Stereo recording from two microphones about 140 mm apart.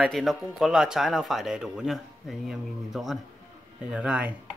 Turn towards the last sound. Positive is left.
turn(degrees=-10)  # may be behind; listen again after turning